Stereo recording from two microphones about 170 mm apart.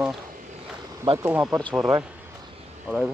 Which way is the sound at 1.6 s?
5° left (ahead or behind).